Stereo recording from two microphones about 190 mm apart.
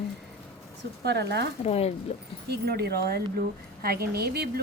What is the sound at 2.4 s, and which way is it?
A woman's voice, 55° right (ahead or behind).